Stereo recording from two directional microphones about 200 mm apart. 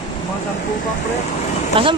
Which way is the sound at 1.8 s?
25° right (ahead or behind).